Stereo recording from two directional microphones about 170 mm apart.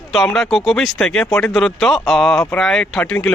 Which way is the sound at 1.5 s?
Centre (ahead or behind).